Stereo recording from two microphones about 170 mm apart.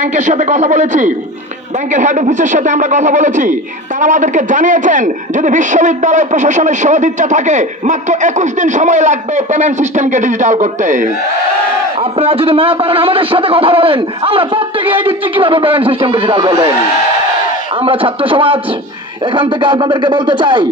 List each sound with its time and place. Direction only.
0.0 s a man's voice: 45° right (ahead or behind)
12.0 s a man's voice: 35° right (ahead or behind)
17.7 s a man's voice: 30° right (ahead or behind)